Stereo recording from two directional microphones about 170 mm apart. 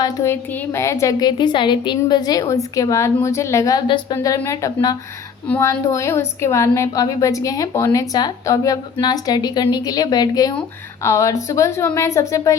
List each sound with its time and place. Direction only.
0.0 s a woman's voice: 15° left (ahead or behind)